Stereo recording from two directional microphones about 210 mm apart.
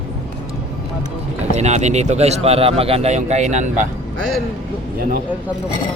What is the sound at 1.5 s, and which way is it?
Speech, 35° right (ahead or behind).